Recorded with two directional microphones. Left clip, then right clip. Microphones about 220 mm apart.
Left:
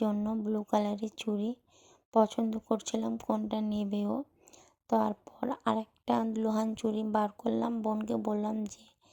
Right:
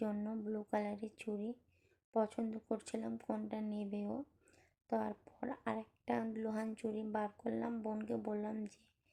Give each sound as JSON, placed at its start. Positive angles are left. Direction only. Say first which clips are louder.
{"t": 0.0, "sound": "speech", "louder": "left 9 dB", "side_deg": 30}